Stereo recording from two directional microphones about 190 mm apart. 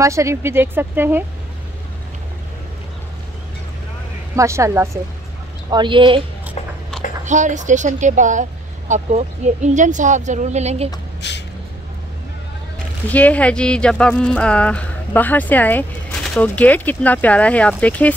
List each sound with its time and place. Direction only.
0.0 s speech: 15° right (ahead or behind)
4.4 s speech: 15° right (ahead or behind)
5.7 s speech: 25° right (ahead or behind)
7.2 s speech: 40° right (ahead or behind)
11.1 s a sound: 65° left (ahead or behind)
13.1 s speech: 10° left (ahead or behind)